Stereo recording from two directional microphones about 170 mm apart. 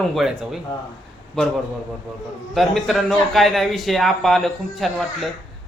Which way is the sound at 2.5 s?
Centre (ahead or behind).